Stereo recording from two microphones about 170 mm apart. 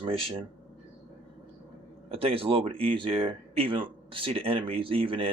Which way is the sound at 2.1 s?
35° right (ahead or behind).